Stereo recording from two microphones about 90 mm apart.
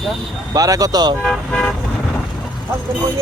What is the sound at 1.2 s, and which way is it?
Speech, 5° left (ahead or behind).